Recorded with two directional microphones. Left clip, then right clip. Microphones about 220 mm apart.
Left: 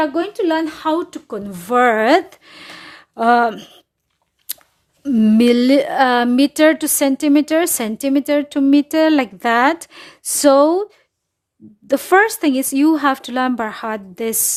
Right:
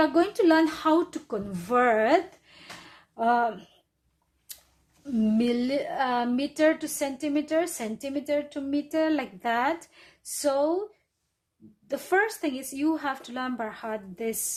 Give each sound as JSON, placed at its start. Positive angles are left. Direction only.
{"t": 0.0, "sound": "speech", "side_deg": 20}
{"t": 5.2, "sound": "a woman's voice", "side_deg": 50}
{"t": 11.9, "sound": "a woman's voice", "side_deg": 50}